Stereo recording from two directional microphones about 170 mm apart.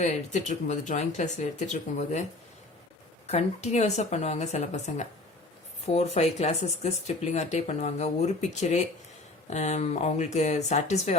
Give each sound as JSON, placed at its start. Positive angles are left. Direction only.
{"t": 0.0, "sound": "speech", "side_deg": 45}
{"t": 3.2, "sound": "speech", "side_deg": 40}
{"t": 9.5, "sound": "speech", "side_deg": 40}